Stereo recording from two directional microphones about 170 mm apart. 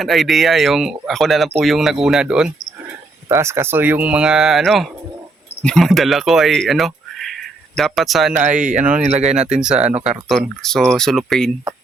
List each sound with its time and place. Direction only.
0.0 s speech: centre (ahead or behind)
3.2 s speech: 15° right (ahead or behind); by 8.3 s centre (ahead or behind)
8.4 s speech: 45° right (ahead or behind)
9.6 s speech: 5° right (ahead or behind)
9.8 s speech: 40° right (ahead or behind)
10.1 s speech: centre (ahead or behind)